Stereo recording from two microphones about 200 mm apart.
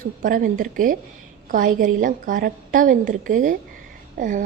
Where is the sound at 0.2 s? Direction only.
40° right (ahead or behind).